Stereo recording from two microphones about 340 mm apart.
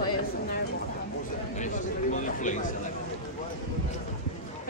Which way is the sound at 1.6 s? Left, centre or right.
Left.